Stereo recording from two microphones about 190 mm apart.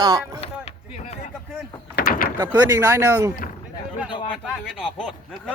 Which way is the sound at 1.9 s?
50° left (ahead or behind).